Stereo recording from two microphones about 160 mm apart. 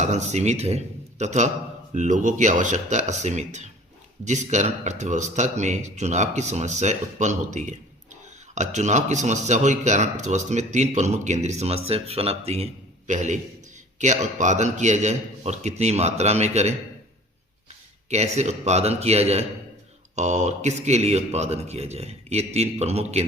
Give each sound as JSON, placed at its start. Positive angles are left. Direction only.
{"t": 0.0, "sound": "speech", "side_deg": -45}
{"t": 13.1, "sound": "speech", "side_deg": -50}